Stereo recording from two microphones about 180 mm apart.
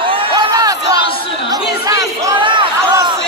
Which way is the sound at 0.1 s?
30° right (ahead or behind).